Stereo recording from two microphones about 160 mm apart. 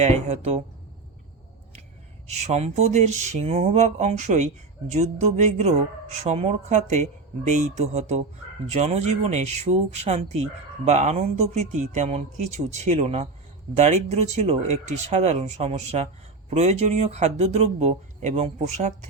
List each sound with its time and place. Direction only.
0.0 s speech: 45° right (ahead or behind)
2.2 s speech: 45° right (ahead or behind)